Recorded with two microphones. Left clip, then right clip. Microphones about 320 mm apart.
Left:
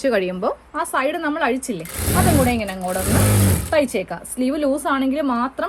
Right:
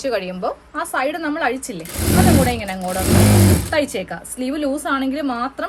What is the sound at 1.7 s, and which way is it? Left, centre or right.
Speech, centre.